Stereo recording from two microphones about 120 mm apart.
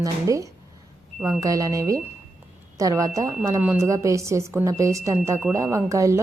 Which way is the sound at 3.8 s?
25° right (ahead or behind).